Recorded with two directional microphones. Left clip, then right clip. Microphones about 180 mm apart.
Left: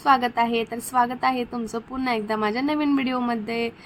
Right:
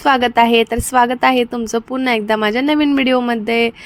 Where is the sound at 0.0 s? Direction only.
40° right (ahead or behind).